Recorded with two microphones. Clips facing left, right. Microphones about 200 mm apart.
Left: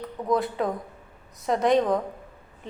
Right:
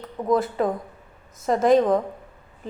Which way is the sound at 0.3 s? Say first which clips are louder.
Right 3 dB; centre (ahead or behind).